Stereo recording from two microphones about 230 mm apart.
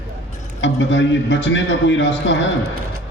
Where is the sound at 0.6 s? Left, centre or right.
Left.